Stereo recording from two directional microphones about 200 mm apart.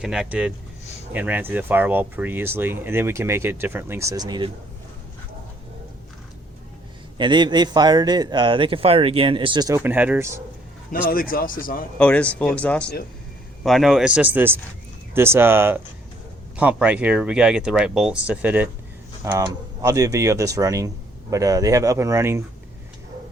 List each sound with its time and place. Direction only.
0.0 s speech: 5° right (ahead or behind); by 4.5 s 20° right (ahead or behind)
7.2 s a man's voice: 25° right (ahead or behind)
10.9 s speech: 45° left (ahead or behind)
11.9 s speech: 5° left (ahead or behind); by 22.4 s 15° right (ahead or behind)